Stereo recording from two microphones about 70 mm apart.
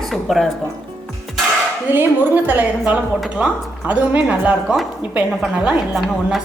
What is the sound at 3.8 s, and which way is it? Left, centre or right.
A woman's voice, right.